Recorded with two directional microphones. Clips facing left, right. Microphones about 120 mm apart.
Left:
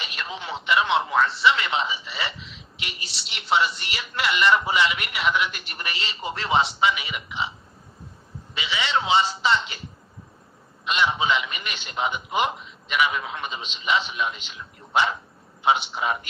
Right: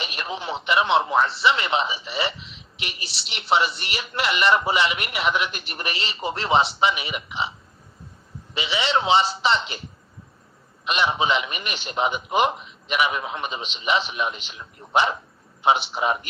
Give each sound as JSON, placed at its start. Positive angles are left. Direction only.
{"t": 0.0, "sound": "a man's voice", "side_deg": -20}
{"t": 8.5, "sound": "a man's voice", "side_deg": -20}
{"t": 10.8, "sound": "a man's voice", "side_deg": -20}
{"t": 15.9, "sound": "a man's voice", "side_deg": -20}